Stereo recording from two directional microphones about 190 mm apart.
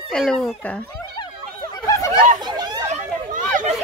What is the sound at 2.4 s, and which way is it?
Chatter, 20° right (ahead or behind).